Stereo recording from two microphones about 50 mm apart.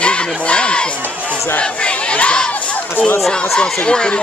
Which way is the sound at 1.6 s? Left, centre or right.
Left.